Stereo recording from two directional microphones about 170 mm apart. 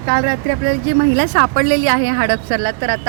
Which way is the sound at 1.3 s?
65° right (ahead or behind).